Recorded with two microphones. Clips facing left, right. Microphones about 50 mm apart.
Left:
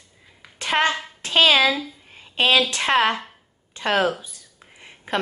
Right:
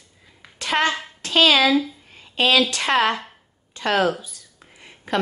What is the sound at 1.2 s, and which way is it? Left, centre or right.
Speech, left.